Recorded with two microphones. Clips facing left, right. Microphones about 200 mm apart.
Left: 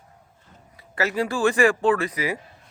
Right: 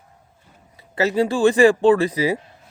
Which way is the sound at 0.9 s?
25° right (ahead or behind).